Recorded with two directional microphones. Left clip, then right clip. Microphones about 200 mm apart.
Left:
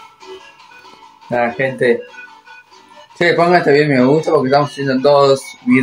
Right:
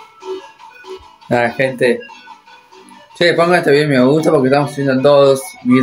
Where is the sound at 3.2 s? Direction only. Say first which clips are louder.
Even; centre (ahead or behind).